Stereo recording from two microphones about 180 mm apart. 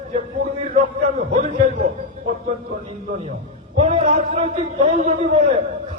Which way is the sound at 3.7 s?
35° right (ahead or behind).